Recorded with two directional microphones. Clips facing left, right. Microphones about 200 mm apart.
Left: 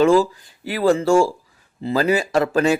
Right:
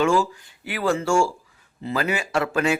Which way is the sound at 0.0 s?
35° left (ahead or behind).